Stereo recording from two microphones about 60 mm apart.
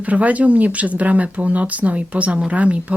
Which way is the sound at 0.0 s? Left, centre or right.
Right.